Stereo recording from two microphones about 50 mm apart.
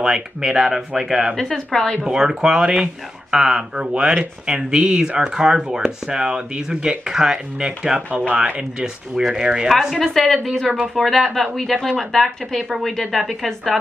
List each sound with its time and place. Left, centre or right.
0.0 s speech: centre
1.3 s speech: centre
2.0 s speech: centre
9.9 s speech: centre